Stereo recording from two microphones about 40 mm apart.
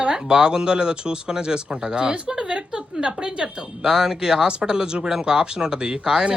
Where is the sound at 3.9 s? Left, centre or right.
Centre.